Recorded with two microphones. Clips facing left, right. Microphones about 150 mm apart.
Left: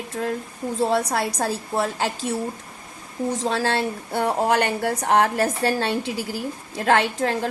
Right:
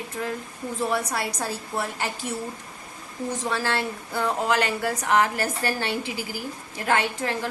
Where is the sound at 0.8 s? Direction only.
85° left.